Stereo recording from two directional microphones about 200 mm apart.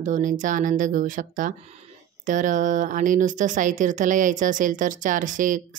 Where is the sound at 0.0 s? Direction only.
40° right (ahead or behind).